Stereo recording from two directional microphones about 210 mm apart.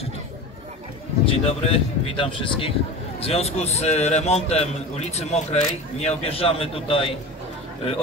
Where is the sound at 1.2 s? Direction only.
25° left (ahead or behind).